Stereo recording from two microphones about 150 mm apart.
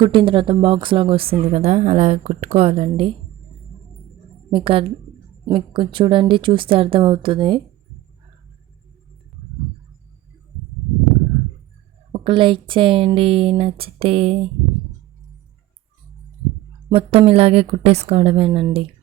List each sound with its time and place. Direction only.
0.0 s a woman's voice: 35° right (ahead or behind)
4.5 s speech: 35° right (ahead or behind)
12.1 s speech: 35° right (ahead or behind)
16.9 s speech: 40° right (ahead or behind)